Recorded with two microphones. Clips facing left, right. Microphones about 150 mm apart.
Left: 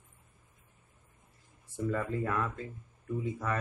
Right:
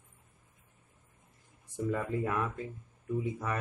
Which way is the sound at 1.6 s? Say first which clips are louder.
Even; 15° right (ahead or behind).